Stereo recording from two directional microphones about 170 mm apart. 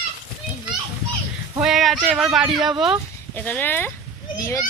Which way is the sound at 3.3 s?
10° left (ahead or behind).